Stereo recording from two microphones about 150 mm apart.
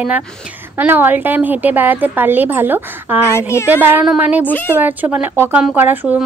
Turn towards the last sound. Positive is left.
turn(degrees=-10)  # may be behind; listen again after turning